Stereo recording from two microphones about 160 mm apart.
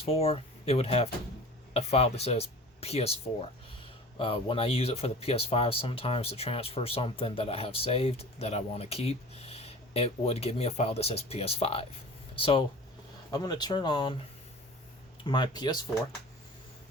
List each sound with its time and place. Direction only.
0.0 s speech: 35° left (ahead or behind)
13.3 s speech: 25° left (ahead or behind)
15.2 s speech: 30° left (ahead or behind)